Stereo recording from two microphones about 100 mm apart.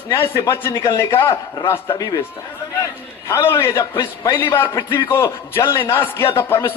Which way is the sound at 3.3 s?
25° left (ahead or behind).